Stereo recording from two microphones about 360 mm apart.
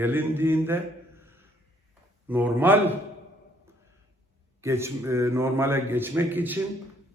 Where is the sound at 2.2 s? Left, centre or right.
Centre.